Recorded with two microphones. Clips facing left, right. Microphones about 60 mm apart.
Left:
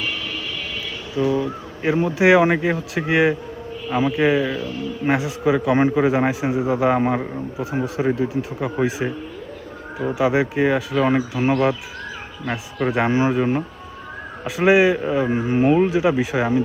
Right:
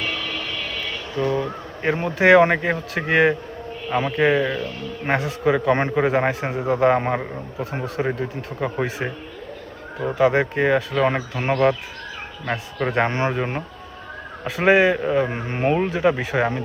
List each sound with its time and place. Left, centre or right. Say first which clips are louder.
0.0 s train: even; right
1.1 s a man's voice: left 3 dB; centre
9.0 s speech: left 3 dB; centre
10.0 s speech: right 1 dB; centre
13.4 s a man's voice: left 5 dB; centre